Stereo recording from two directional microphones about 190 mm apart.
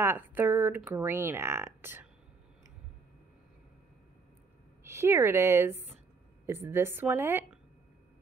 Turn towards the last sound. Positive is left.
turn(degrees=-15)  # may be behind; listen again after turning